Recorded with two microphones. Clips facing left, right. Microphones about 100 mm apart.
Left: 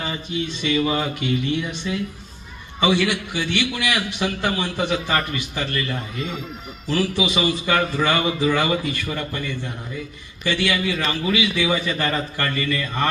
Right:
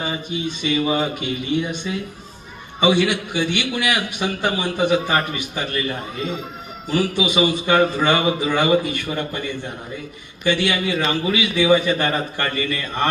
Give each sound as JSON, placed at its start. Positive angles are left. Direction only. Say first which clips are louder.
{"t": 0.6, "sound": "a man's voice", "louder": "right 1 dB", "side_deg": -20}